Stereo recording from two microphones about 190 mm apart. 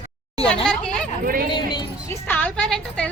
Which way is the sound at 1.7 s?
20° left (ahead or behind).